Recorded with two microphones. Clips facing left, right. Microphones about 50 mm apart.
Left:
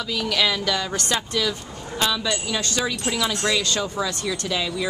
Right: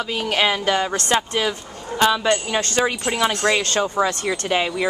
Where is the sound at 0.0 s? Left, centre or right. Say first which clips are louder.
Right 3 dB; right.